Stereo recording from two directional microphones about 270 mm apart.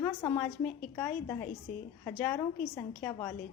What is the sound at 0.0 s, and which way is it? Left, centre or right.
A woman's voice, centre.